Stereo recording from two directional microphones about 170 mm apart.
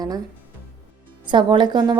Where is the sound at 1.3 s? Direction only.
25° right (ahead or behind).